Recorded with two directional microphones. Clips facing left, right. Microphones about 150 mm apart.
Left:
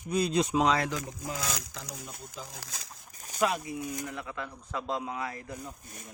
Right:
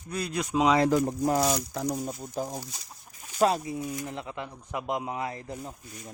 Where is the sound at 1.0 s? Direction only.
75° right (ahead or behind).